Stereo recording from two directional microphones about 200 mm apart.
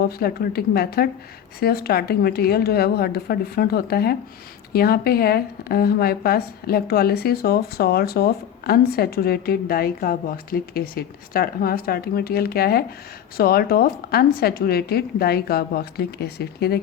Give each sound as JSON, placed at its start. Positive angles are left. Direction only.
{"t": 0.0, "sound": "speech", "side_deg": 50}